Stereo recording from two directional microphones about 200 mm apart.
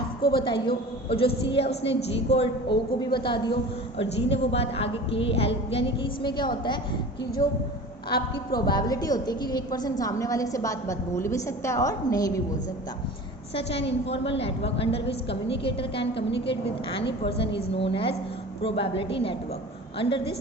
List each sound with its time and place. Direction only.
0.2 s a woman's voice: 25° left (ahead or behind)
8.6 s a woman's voice: 20° left (ahead or behind)
13.5 s a woman's voice: 30° left (ahead or behind)
15.0 s a woman's voice: 60° left (ahead or behind)
15.6 s a woman's voice: 25° left (ahead or behind)
17.2 s a woman's voice: 30° left (ahead or behind)